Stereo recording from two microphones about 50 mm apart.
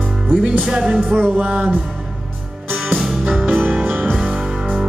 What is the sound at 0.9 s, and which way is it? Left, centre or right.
Music, right.